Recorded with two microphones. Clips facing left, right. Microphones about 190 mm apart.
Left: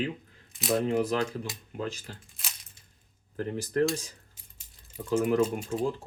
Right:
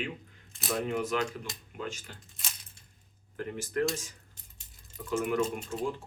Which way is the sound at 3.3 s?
35° left (ahead or behind).